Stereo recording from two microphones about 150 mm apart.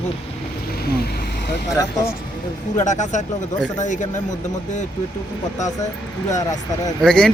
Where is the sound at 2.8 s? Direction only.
55° left (ahead or behind).